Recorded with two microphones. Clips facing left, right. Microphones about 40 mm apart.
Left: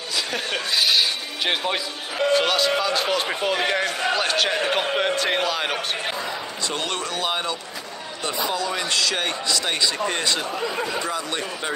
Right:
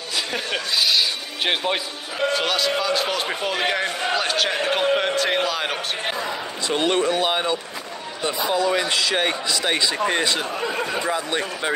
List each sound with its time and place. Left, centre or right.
0.7 s a man's voice: centre
1.4 s a man's voice: centre
2.1 s a man's voice: centre
6.7 s a man's voice: right